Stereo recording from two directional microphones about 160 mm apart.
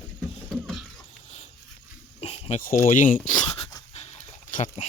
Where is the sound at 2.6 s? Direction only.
60° left (ahead or behind).